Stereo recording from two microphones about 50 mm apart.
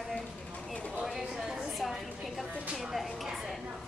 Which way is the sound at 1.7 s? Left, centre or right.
Centre.